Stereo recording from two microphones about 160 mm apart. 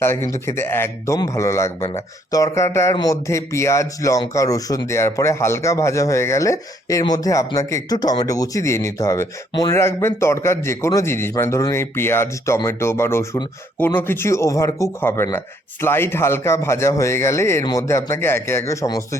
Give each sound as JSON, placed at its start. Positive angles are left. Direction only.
{"t": 0.0, "sound": "a man's voice", "side_deg": 15}